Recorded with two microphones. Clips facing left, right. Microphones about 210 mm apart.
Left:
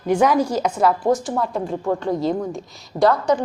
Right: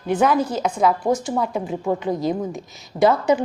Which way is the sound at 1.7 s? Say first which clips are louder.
Even; 15° right (ahead or behind).